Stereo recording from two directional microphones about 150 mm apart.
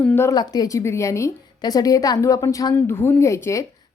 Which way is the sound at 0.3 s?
25° left (ahead or behind).